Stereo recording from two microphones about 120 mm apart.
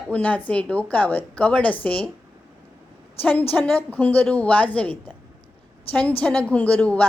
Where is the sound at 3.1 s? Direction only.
15° left (ahead or behind).